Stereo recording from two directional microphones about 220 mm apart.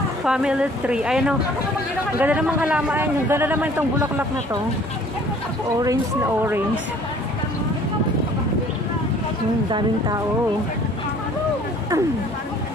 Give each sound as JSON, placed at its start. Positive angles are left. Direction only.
{"t": 0.2, "sound": "a man's voice", "side_deg": -5}
{"t": 5.8, "sound": "a man's voice", "side_deg": -15}
{"t": 9.7, "sound": "speech", "side_deg": -20}